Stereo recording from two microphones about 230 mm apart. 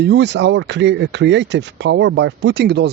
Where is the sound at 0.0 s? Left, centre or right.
Right.